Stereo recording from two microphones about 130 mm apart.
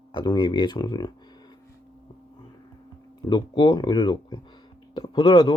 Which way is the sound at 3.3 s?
35° left (ahead or behind).